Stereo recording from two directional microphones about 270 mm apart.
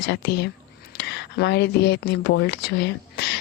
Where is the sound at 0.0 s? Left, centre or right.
Left.